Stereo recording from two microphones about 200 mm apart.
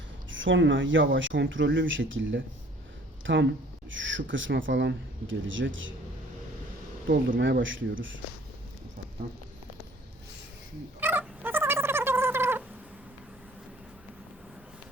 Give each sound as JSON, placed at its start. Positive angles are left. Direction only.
{"t": 0.3, "sound": "speech", "side_deg": -70}
{"t": 7.1, "sound": "speech", "side_deg": -45}
{"t": 7.4, "sound": "speech", "side_deg": -70}
{"t": 11.0, "sound": "cat", "side_deg": -10}